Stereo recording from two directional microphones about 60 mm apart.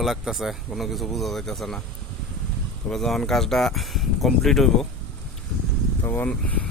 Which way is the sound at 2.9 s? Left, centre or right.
Centre.